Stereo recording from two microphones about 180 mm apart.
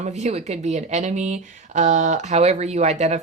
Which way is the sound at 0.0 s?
40° right (ahead or behind).